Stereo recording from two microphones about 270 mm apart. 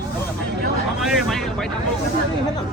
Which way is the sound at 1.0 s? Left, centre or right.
Centre.